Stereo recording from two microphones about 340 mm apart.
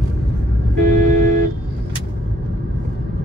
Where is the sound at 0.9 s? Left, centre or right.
Right.